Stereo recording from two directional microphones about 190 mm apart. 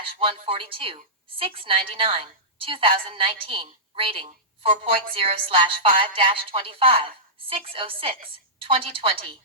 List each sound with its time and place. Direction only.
0.0 s a woman's voice: 30° right (ahead or behind)